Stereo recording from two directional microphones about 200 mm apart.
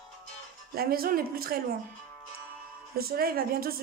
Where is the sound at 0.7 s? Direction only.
50° right (ahead or behind).